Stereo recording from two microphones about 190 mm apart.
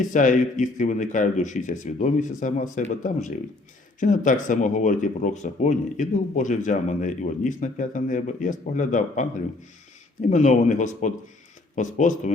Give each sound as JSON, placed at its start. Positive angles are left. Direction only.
{"t": 0.0, "sound": "speech", "side_deg": 40}
{"t": 10.2, "sound": "speech", "side_deg": 40}